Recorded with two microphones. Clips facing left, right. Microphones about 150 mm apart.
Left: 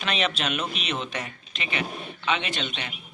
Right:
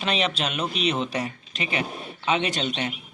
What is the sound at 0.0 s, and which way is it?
Speech, 30° right (ahead or behind).